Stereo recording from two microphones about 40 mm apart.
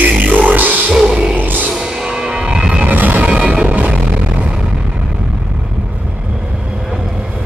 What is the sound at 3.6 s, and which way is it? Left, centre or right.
Music, right.